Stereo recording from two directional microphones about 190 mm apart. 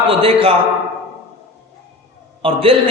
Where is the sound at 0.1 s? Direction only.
30° right (ahead or behind).